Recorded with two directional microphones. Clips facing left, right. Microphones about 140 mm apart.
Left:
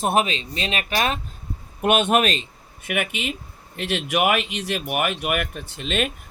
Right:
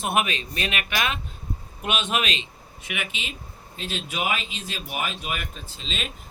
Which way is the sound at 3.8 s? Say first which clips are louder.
Left 8 dB; 70° left (ahead or behind).